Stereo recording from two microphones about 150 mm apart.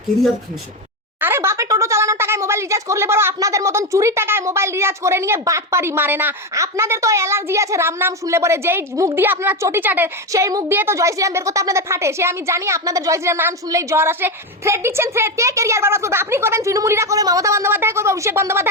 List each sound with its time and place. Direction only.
1.2 s speech: 15° right (ahead or behind)